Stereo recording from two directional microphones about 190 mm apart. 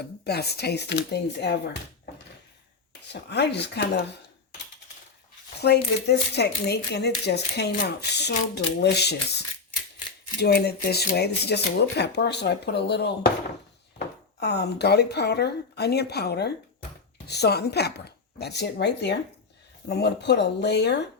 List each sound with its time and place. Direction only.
0.3 s speech: 60° left (ahead or behind)
3.1 s speech: 60° left (ahead or behind)
5.5 s speech: 60° left (ahead or behind)
10.4 s speech: 60° left (ahead or behind)
14.3 s speech: 60° left (ahead or behind)